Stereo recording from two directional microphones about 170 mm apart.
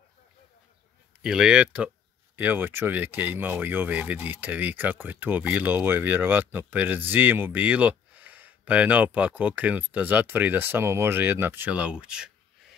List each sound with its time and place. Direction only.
1.2 s speech: 5° right (ahead or behind)